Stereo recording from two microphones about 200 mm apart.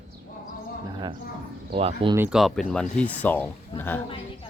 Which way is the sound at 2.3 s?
Centre (ahead or behind).